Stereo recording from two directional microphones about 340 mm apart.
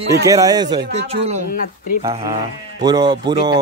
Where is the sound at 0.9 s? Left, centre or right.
Right.